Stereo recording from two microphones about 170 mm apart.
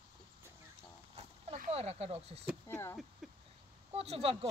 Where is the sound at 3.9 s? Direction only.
35° right (ahead or behind).